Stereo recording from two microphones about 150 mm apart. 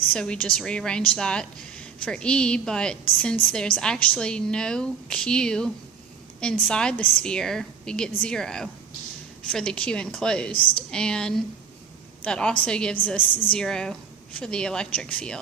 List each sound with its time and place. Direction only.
0.1 s a woman's voice: 5° left (ahead or behind)